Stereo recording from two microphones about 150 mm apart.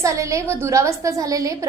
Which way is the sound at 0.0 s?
20° right (ahead or behind).